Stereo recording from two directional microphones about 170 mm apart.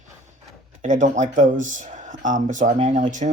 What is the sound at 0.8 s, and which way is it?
Speech, 45° right (ahead or behind).